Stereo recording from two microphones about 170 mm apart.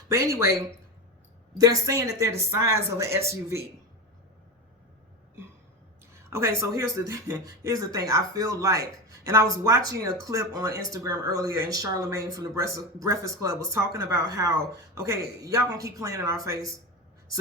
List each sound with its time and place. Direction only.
0.1 s speech: 15° right (ahead or behind)
6.3 s speech: 15° right (ahead or behind)